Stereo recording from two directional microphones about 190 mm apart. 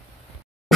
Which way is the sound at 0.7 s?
Centre (ahead or behind).